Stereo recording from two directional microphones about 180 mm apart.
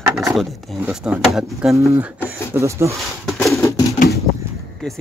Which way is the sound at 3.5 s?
15° left (ahead or behind).